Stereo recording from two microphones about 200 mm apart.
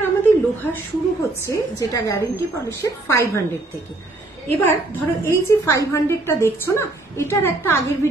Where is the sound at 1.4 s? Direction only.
15° left (ahead or behind).